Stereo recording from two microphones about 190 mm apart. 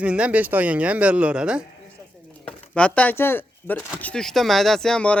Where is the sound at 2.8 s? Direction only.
5° left (ahead or behind).